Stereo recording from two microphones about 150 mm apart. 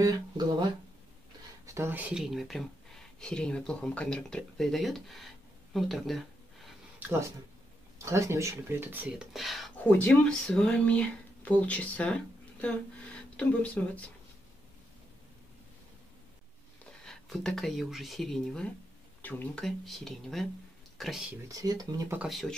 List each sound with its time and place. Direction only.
0.0 s speech: 30° right (ahead or behind)
1.7 s speech: 15° right (ahead or behind); by 6.7 s centre (ahead or behind)
7.0 s speech: 15° right (ahead or behind); by 9.7 s centre (ahead or behind)
9.8 s speech: 10° left (ahead or behind)
17.0 s speech: 5° left (ahead or behind)
19.6 s speech: centre (ahead or behind)
21.5 s speech: 25° right (ahead or behind)
22.1 s speech: 5° right (ahead or behind)